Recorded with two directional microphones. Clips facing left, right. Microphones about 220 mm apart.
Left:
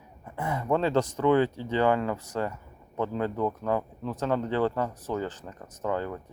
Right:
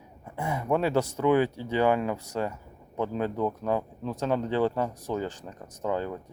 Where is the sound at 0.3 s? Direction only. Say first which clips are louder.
Even; 10° right (ahead or behind).